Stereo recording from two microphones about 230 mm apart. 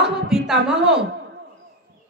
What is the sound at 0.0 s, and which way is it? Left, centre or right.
A woman's voice, centre.